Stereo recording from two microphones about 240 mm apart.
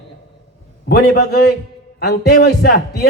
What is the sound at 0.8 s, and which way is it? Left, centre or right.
A man's voice, left.